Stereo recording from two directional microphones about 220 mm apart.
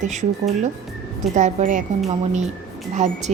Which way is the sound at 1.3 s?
35° right (ahead or behind).